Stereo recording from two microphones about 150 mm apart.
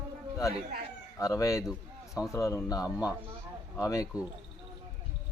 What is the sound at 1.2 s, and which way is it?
Speech, 20° left (ahead or behind).